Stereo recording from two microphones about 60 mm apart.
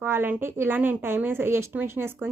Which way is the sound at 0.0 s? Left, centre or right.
Right.